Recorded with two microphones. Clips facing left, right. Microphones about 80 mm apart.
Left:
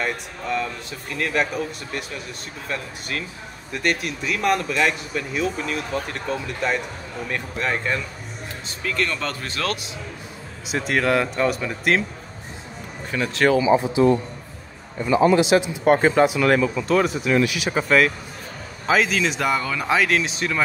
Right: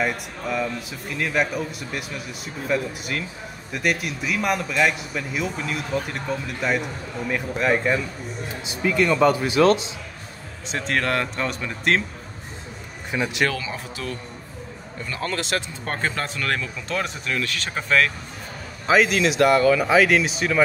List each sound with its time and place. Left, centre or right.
0.0 s speech: centre
10.7 s speech: centre
13.1 s speech: centre
13.5 s speech: centre
17.3 s speech: centre